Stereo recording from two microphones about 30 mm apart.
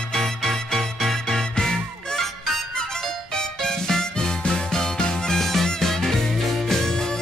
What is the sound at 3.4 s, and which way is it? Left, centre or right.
Music, centre.